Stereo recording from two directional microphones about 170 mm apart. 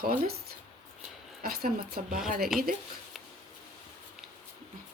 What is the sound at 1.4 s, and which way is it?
Speech, 65° right (ahead or behind).